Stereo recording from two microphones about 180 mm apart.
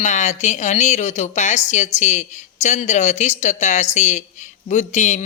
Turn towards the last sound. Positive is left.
turn(degrees=40)  # may be behind; listen again after turning